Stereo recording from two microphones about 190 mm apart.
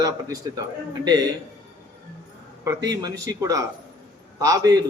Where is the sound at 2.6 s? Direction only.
15° right (ahead or behind).